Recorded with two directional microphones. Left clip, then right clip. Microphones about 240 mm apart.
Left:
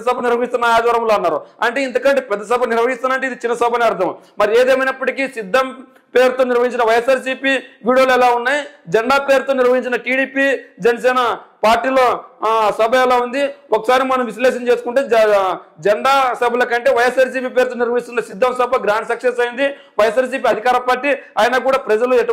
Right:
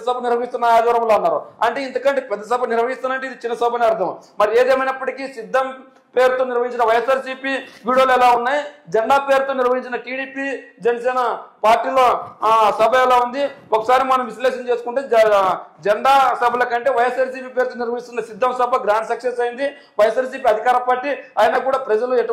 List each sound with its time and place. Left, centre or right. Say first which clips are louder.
0.0 s a man's voice: left 3 dB; left